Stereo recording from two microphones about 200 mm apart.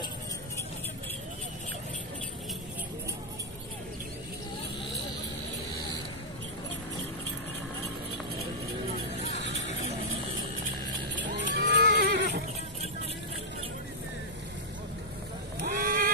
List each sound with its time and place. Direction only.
11.1 s horse: 65° right (ahead or behind)
15.6 s vehicle: 45° right (ahead or behind)